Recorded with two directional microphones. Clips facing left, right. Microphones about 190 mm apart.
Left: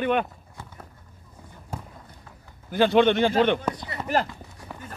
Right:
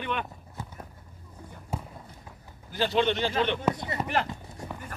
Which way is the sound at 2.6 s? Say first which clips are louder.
Left 7 dB; 55° left (ahead or behind).